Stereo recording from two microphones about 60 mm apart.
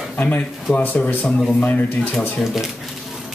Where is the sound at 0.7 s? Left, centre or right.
Left.